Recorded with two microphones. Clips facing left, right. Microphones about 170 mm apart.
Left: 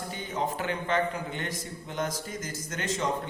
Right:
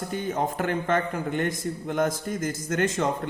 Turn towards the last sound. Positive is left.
turn(degrees=-50)  # may be behind; listen again after turning